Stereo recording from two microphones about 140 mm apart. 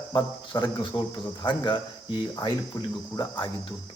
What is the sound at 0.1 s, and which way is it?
A man's voice, 35° left (ahead or behind).